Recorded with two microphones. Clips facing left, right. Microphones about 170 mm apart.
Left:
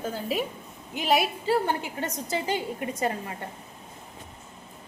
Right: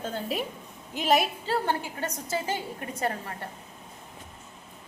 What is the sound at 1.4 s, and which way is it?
A woman's voice, 15° left (ahead or behind).